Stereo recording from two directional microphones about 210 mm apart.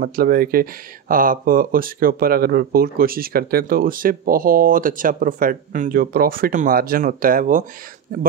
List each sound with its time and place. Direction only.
0.0 s speech: 45° right (ahead or behind)